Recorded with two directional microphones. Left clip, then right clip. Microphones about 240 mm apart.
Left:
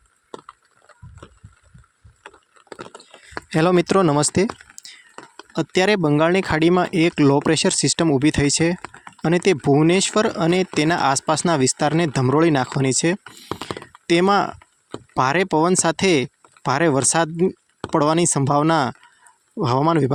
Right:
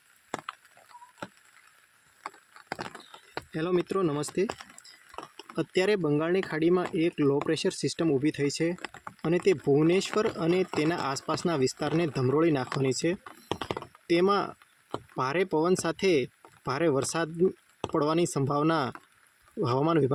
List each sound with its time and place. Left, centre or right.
3.5 s speech: left
13.7 s a sound: left
14.9 s speech: left